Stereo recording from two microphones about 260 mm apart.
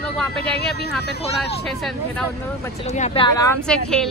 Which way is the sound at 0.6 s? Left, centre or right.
Left.